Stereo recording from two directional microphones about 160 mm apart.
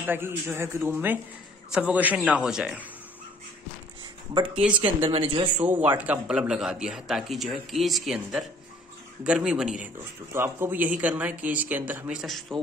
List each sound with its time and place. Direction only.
0.0 s speech: 15° right (ahead or behind)
4.6 s speech: 5° right (ahead or behind)
5.0 s speech: 35° right (ahead or behind)
5.6 s speech: 10° right (ahead or behind)
10.3 s speech: 15° right (ahead or behind); by 12.5 s centre (ahead or behind)